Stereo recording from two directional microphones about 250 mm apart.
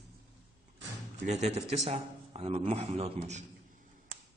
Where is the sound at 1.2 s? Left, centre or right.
Right.